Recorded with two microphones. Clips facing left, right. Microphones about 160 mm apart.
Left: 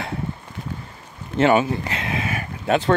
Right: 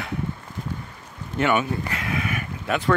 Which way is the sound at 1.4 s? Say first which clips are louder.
Left 5 dB; 30° left (ahead or behind).